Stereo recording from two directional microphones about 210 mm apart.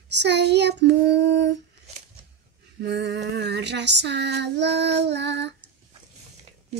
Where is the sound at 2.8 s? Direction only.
55° right (ahead or behind).